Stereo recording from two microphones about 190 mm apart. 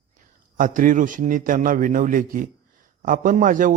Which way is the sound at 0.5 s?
45° right (ahead or behind).